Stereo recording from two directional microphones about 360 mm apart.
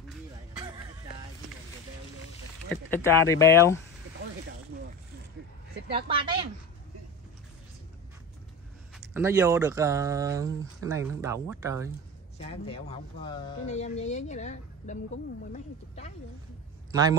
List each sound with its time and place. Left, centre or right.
0.6 s a sound: centre
2.9 s speech: centre
6.0 s speech: centre
9.1 s speech: centre
12.4 s speech: centre
16.9 s speech: centre